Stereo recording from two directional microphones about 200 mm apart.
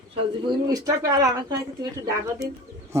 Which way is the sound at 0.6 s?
15° right (ahead or behind).